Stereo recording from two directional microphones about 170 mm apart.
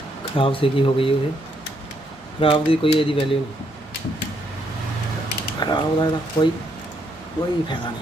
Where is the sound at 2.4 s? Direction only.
30° left (ahead or behind).